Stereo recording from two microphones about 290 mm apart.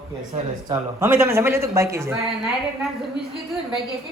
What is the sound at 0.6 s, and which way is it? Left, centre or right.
Speech, centre.